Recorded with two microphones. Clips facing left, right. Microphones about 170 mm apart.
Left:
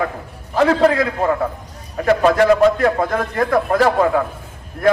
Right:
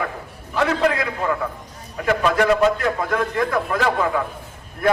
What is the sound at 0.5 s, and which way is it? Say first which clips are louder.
A man's voice: left 6 dB; 35° left (ahead or behind).